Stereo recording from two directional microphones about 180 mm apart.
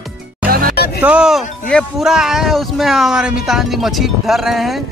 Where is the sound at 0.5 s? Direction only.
50° right (ahead or behind).